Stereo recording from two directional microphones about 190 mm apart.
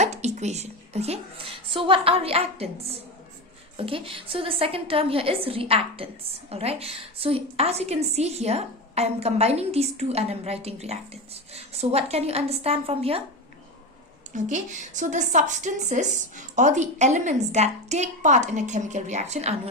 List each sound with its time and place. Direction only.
0.0 s a woman's voice: 35° right (ahead or behind)
14.3 s a woman's voice: 40° right (ahead or behind)